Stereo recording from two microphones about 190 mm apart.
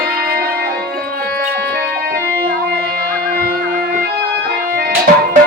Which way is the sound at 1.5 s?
55° right (ahead or behind).